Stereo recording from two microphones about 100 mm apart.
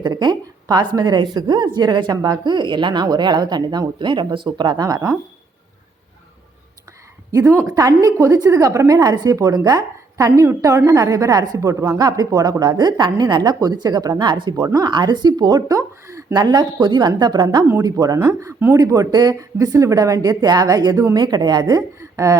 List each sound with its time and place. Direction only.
0.0 s speech: 45° right (ahead or behind)
4.9 s a woman's voice: 35° right (ahead or behind)
7.3 s a woman's voice: 30° right (ahead or behind)
16.3 s a woman's voice: 45° right (ahead or behind)